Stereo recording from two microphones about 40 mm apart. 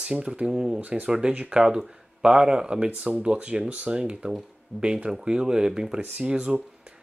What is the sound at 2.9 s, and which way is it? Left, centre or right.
Speech, right.